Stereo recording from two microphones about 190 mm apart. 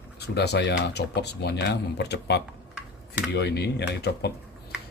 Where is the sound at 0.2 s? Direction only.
60° left (ahead or behind).